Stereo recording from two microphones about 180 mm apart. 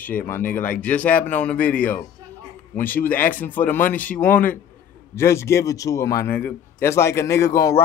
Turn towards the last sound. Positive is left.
turn(degrees=15)  # may be behind; listen again after turning